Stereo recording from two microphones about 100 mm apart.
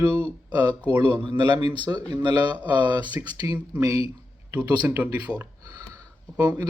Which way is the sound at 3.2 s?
40° right (ahead or behind).